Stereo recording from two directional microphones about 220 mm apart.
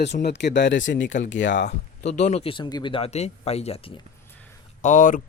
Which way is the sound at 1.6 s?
30° left (ahead or behind).